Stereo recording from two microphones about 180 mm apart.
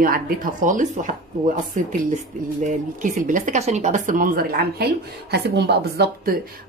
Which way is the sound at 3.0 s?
45° right (ahead or behind).